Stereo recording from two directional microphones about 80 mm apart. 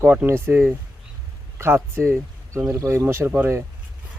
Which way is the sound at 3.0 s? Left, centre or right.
Right.